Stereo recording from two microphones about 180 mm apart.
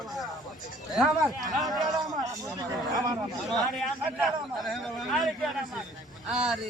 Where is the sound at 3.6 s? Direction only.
Centre (ahead or behind).